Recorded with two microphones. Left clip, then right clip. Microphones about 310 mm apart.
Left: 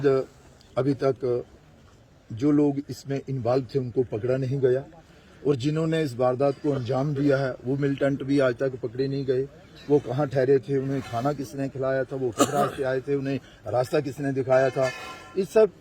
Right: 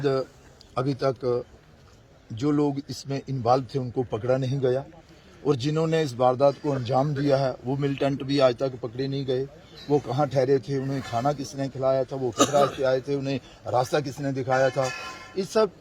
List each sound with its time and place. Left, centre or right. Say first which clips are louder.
0.0 s speech: left 3 dB; centre
12.4 s a man's voice: right 3 dB; left
12.8 s speech: right 2 dB; centre